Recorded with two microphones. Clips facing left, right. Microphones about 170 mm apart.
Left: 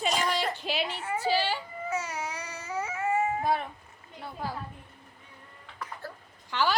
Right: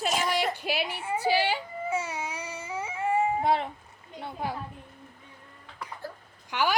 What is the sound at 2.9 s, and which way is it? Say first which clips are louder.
Cat: right 2 dB; 30° right (ahead or behind).